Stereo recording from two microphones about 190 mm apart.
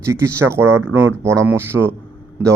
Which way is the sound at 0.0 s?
15° right (ahead or behind).